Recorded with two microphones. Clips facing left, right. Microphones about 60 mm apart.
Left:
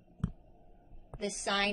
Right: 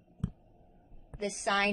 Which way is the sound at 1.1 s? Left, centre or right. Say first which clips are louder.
Right 3 dB; right.